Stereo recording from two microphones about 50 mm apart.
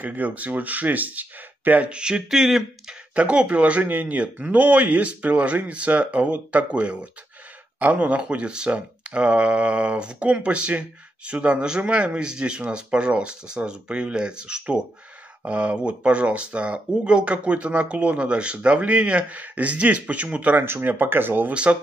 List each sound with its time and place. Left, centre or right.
0.0 s speech: right
1.9 s speech: centre
2.2 s speech: centre
2.9 s speech: right
20.8 s speech: right
21.5 s speech: right